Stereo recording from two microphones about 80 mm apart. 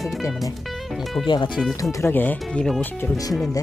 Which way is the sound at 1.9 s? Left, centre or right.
Left.